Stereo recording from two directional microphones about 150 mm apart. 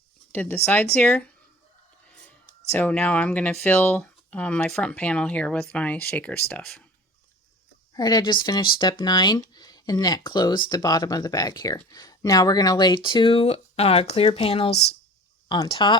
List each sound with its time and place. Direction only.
0.3 s speech: 15° left (ahead or behind)
2.7 s speech: 10° left (ahead or behind)
7.9 s speech: 25° left (ahead or behind)